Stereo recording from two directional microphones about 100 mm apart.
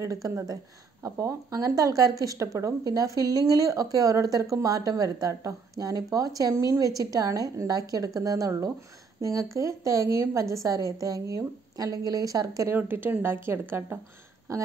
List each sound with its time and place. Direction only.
0.0 s speech: 30° right (ahead or behind)
12.7 s speech: 20° right (ahead or behind)